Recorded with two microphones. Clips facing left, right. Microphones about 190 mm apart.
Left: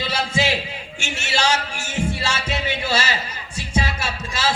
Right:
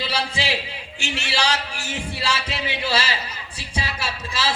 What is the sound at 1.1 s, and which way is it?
Music, 45° left (ahead or behind).